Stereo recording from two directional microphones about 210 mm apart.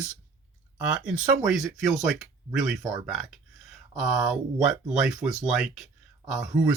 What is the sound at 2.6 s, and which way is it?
Speech, centre (ahead or behind).